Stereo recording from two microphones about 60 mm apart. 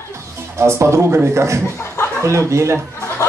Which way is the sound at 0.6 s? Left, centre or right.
Right.